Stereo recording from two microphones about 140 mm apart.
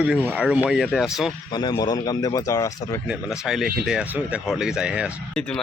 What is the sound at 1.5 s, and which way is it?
Speech, 30° left (ahead or behind).